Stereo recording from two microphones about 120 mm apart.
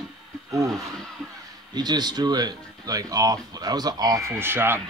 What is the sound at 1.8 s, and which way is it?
Speech, 35° right (ahead or behind).